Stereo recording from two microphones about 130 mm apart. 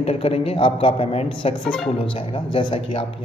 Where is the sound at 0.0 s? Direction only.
50° left (ahead or behind).